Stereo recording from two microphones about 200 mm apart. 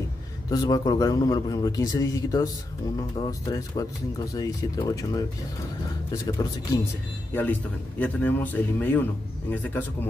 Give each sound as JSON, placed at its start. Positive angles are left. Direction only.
{"t": 0.5, "sound": "a man's voice", "side_deg": 20}
{"t": 8.0, "sound": "speech", "side_deg": 10}